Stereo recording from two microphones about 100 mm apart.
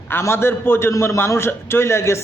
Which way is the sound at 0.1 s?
25° left (ahead or behind).